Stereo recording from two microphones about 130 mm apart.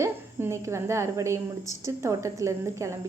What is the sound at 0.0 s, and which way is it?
A woman's voice, 20° right (ahead or behind).